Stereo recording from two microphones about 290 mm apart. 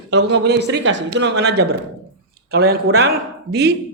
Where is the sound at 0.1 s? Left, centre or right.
Right.